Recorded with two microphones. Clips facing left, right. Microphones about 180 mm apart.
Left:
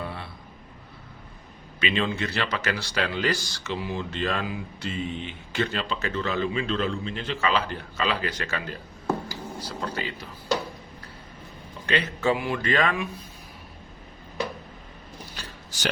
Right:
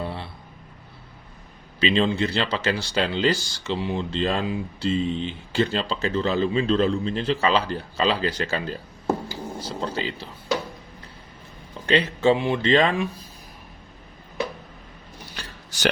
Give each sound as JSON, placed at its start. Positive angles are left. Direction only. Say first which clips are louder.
{"t": 0.0, "sound": "a sound", "louder": "right 4 dB", "side_deg": -30}
{"t": 1.8, "sound": "speech", "louder": "right 5 dB", "side_deg": -30}
{"t": 11.9, "sound": "speech", "louder": "right 5 dB", "side_deg": -30}